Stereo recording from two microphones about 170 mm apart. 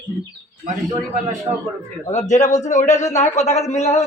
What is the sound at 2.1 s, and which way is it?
A man's voice, 45° left (ahead or behind).